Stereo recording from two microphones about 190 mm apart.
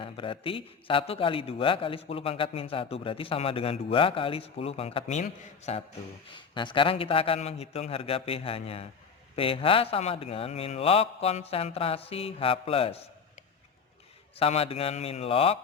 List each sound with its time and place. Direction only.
0.0 s a man's voice: 25° left (ahead or behind)
6.3 s a man's voice: 25° left (ahead or behind)
14.3 s a man's voice: 30° left (ahead or behind)